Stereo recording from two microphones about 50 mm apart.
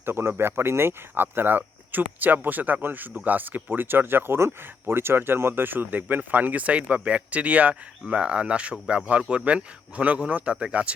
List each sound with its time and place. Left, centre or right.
0.0 s speech: right
1.1 s speech: right